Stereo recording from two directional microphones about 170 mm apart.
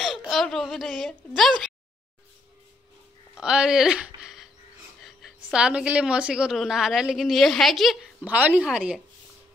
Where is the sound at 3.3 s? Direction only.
5° right (ahead or behind).